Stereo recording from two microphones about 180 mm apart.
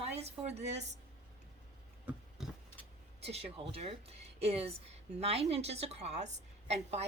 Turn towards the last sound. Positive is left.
turn(degrees=-40)  # may be behind; listen again after turning